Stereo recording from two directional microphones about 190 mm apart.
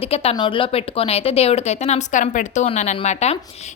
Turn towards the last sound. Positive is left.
turn(degrees=35)  # may be behind; listen again after turning